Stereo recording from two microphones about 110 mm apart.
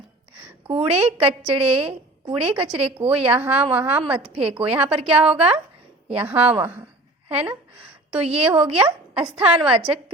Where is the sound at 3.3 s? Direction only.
15° right (ahead or behind).